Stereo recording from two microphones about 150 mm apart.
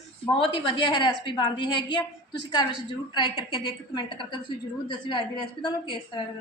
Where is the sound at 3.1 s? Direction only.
30° left (ahead or behind).